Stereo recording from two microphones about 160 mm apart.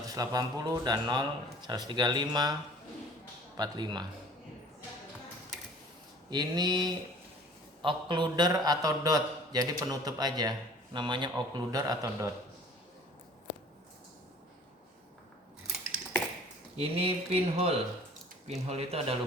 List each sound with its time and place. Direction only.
0.1 s a man's voice: 25° right (ahead or behind)
3.6 s a man's voice: 25° right (ahead or behind)
6.3 s a man's voice: 25° right (ahead or behind)
16.7 s speech: 35° right (ahead or behind)